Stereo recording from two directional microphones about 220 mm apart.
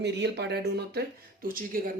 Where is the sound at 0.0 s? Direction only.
50° right (ahead or behind).